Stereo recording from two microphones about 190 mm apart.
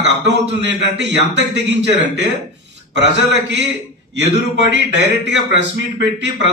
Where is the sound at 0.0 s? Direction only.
65° right (ahead or behind).